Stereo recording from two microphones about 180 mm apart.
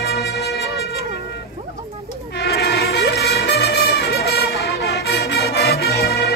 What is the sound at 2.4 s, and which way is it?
Music, 65° left (ahead or behind).